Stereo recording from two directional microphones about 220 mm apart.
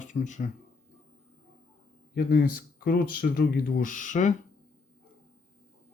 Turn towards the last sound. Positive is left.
turn(degrees=35)  # may be behind; listen again after turning